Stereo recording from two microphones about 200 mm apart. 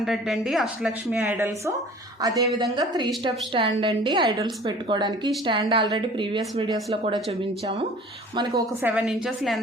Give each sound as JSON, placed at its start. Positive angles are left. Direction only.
{"t": 0.0, "sound": "speech", "side_deg": 0}
{"t": 2.2, "sound": "a woman's voice", "side_deg": -20}
{"t": 8.8, "sound": "speech", "side_deg": -5}